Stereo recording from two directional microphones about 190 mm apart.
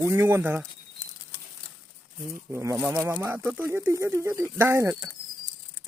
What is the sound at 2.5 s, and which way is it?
Speech, 15° right (ahead or behind).